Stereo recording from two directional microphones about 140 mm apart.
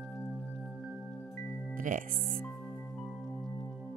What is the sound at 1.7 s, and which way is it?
Speech, 70° right (ahead or behind).